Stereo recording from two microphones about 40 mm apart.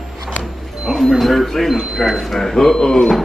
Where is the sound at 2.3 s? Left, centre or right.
Centre.